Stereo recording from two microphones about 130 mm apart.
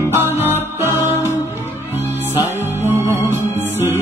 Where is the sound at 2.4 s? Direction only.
20° right (ahead or behind).